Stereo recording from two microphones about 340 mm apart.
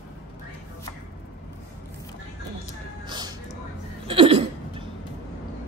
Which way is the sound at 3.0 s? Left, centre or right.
Centre.